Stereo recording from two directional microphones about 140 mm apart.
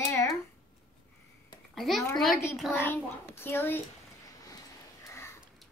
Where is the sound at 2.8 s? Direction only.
15° left (ahead or behind).